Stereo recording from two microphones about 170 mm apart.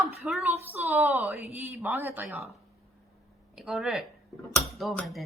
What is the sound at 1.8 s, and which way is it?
Speech, 10° right (ahead or behind).